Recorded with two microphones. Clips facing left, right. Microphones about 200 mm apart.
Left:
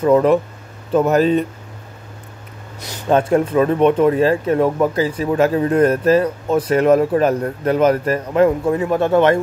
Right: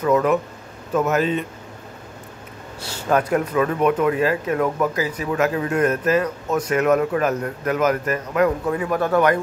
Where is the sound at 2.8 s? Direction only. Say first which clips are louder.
Left 4 dB; 20° left (ahead or behind).